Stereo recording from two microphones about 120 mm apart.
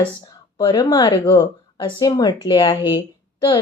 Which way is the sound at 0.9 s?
35° left (ahead or behind).